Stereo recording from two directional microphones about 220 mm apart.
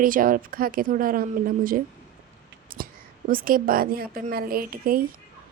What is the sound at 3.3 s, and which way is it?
Speech, 40° right (ahead or behind).